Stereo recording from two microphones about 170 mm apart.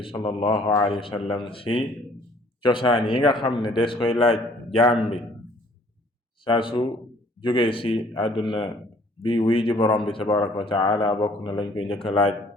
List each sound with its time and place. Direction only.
0.0 s a man's voice: 30° left (ahead or behind)
6.4 s a man's voice: 30° left (ahead or behind)